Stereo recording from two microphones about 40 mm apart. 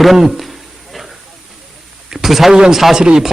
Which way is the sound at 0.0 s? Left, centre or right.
Centre.